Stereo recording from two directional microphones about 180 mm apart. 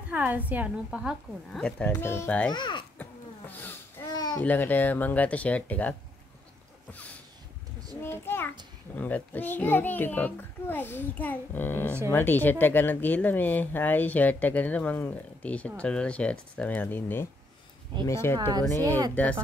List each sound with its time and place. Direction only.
0.1 s a woman's voice: 10° right (ahead or behind)
1.9 s speech: 15° left (ahead or behind)
2.5 s a child's voice: 25° left (ahead or behind)
3.0 s a sound: 10° left (ahead or behind)
4.1 s babbling: 20° left (ahead or behind)
4.4 s speech: 10° left (ahead or behind)
6.9 s a sound: 10° left (ahead or behind)
8.0 s speech: 10° left (ahead or behind)